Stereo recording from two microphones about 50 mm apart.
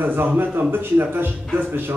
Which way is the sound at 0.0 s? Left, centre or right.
Right.